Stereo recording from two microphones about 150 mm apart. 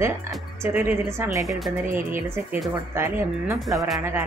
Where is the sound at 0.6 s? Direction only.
15° right (ahead or behind).